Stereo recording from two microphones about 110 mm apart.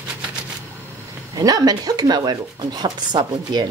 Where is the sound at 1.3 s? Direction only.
35° right (ahead or behind).